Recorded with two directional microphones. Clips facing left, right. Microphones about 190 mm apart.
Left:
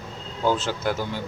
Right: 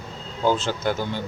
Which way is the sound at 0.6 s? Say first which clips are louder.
Right 1 dB; 5° left (ahead or behind).